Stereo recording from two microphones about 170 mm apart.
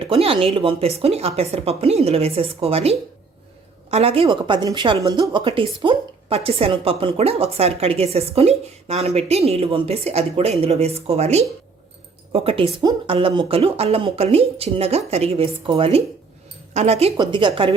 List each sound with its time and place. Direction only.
0.0 s a woman's voice: 35° right (ahead or behind)